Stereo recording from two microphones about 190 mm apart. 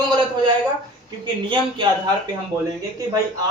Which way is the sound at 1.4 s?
25° right (ahead or behind).